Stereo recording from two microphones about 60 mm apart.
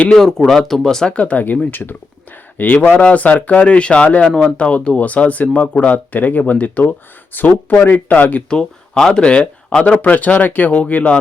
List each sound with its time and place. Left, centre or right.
0.1 s speech: centre
1.1 s speech: left
8.4 s speech: centre